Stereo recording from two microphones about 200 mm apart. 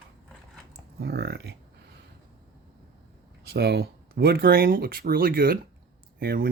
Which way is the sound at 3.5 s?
55° right (ahead or behind).